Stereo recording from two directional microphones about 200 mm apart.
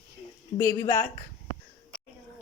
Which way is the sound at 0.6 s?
15° left (ahead or behind).